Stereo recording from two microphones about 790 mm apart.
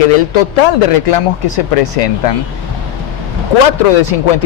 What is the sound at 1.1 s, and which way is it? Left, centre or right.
Speech, left.